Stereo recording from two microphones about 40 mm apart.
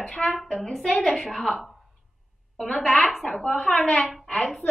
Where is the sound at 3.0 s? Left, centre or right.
Centre.